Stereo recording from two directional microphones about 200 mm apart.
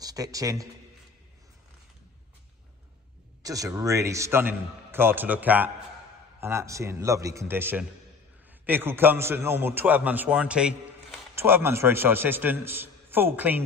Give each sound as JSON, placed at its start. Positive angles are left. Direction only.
{"t": 0.0, "sound": "a man's voice", "side_deg": -15}
{"t": 3.4, "sound": "a man's voice", "side_deg": -15}